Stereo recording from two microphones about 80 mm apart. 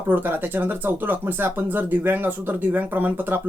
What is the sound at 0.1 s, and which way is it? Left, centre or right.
Speech, right.